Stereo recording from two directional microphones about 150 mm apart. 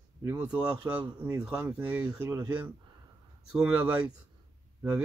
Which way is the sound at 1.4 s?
5° right (ahead or behind).